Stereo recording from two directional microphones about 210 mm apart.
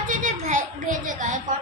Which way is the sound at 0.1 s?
35° right (ahead or behind).